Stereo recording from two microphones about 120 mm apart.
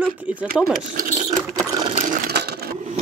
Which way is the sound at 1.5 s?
35° right (ahead or behind).